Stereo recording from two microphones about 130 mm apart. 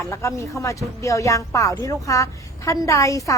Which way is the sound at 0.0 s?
20° left (ahead or behind).